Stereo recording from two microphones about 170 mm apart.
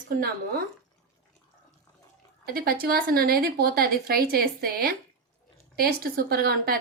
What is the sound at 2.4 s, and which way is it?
A woman's voice, 65° right (ahead or behind).